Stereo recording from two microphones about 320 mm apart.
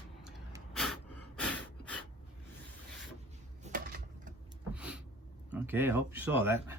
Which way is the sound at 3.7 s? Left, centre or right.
Right.